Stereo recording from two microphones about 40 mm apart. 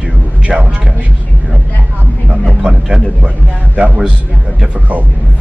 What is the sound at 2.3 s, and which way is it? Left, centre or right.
Speech, right.